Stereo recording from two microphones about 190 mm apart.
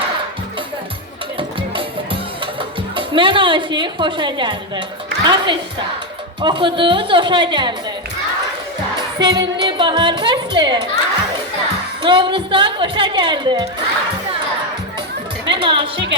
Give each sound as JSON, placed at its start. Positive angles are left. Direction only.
{"t": 2.6, "sound": "a woman's voice", "side_deg": -25}
{"t": 9.1, "sound": "a woman's voice", "side_deg": -20}
{"t": 12.0, "sound": "a woman's voice", "side_deg": -25}
{"t": 15.4, "sound": "music", "side_deg": -25}